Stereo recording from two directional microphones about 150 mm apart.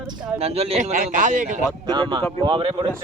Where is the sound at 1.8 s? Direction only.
30° right (ahead or behind).